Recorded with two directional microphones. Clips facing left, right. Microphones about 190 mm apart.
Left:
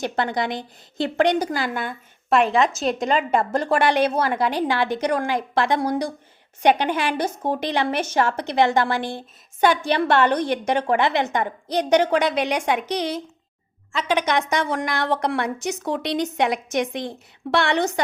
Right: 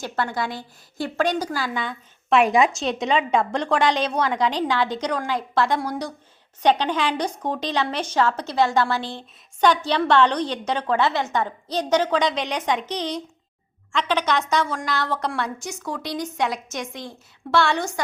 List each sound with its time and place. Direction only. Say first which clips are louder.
0.0 s a woman's voice: left 3 dB; 20° left (ahead or behind)
2.4 s a woman's voice: right 2 dB; 10° right (ahead or behind)
2.7 s a woman's voice: left 1 dB; centre (ahead or behind)
14.2 s a woman's voice: left 1 dB; 15° left (ahead or behind)
14.6 s a woman's voice: left 2 dB; 65° left (ahead or behind)
14.8 s a woman's voice: left 3 dB; 20° left (ahead or behind)
16.0 s a woman's voice: left 3 dB; 65° left (ahead or behind)
17.5 s a woman's voice: left 1 dB; 20° left (ahead or behind)